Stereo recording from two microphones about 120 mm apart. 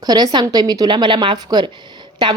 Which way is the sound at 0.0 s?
35° right (ahead or behind).